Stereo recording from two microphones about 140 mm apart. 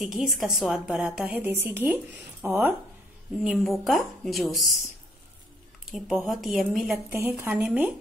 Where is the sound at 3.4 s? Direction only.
Centre (ahead or behind).